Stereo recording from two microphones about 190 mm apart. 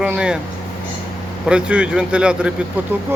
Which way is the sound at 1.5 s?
5° right (ahead or behind).